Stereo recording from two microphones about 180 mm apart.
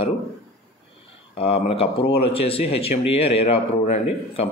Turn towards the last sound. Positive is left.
turn(degrees=35)  # may be behind; listen again after turning